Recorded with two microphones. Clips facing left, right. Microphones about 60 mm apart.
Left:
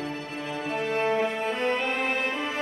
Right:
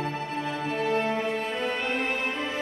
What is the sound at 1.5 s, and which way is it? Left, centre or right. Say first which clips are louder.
Music: left 3 dB; left.